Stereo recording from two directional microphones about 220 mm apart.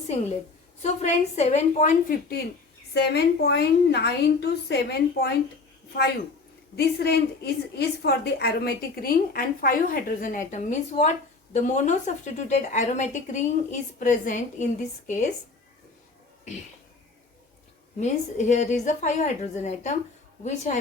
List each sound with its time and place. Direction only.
0.8 s a woman's voice: 30° left (ahead or behind)
2.9 s a woman's voice: 50° left (ahead or behind)
6.7 s a woman's voice: 45° left (ahead or behind)
18.0 s a woman's voice: 30° left (ahead or behind)